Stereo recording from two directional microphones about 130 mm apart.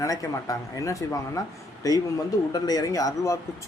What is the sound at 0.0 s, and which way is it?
Speech, 25° left (ahead or behind).